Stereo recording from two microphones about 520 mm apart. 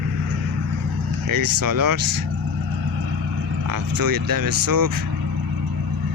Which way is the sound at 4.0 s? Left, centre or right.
Right.